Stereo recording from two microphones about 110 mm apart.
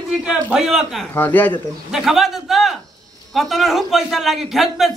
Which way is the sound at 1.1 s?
15° left (ahead or behind).